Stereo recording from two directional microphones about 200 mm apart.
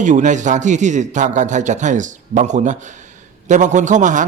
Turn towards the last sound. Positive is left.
turn(degrees=-40)  # may be behind; listen again after turning